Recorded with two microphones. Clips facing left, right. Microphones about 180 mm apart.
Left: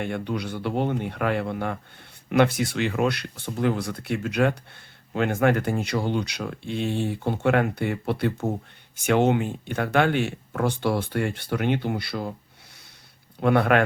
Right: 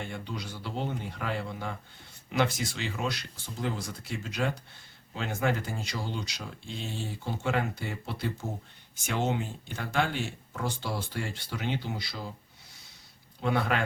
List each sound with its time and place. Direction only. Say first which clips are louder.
0.0 s speech: left 9 dB; 60° left (ahead or behind)
13.4 s speech: left 9 dB; 60° left (ahead or behind)